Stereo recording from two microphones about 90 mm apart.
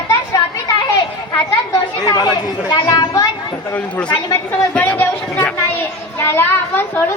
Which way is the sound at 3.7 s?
15° left (ahead or behind).